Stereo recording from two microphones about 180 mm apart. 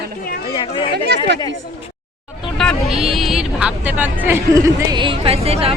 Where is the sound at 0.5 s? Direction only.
30° left (ahead or behind).